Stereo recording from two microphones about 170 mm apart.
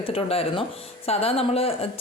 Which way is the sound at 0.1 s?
35° left (ahead or behind).